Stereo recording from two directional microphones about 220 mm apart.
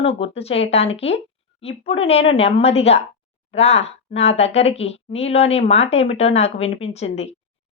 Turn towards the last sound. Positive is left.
turn(degrees=30)  # may be behind; listen again after turning